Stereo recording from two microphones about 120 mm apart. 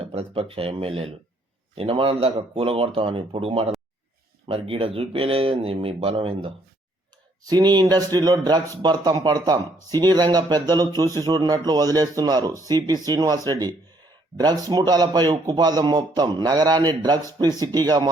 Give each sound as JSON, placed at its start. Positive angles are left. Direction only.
{"t": 0.0, "sound": "speech", "side_deg": -55}
{"t": 7.4, "sound": "a man's voice", "side_deg": -35}